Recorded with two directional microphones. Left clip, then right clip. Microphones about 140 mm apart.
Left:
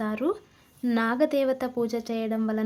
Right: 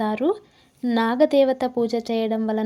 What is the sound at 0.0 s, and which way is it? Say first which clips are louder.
A woman's voice: right 6 dB; 25° right (ahead or behind).